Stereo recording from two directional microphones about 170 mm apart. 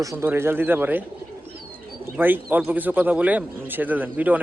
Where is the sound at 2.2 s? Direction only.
10° right (ahead or behind).